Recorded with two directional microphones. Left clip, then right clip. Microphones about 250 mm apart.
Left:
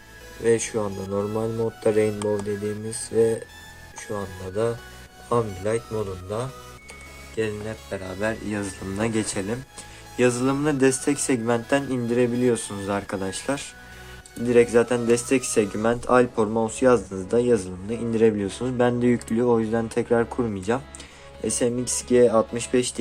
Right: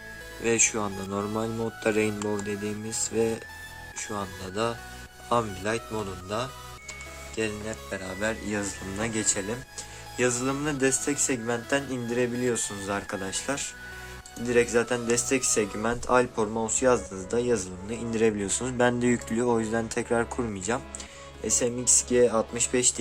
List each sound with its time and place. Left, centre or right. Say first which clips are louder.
0.4 s speech: left 3 dB; right
3.1 s speech: left 7 dB; right
7.4 s speech: left 4 dB; right
7.7 s speech: left 2 dB; centre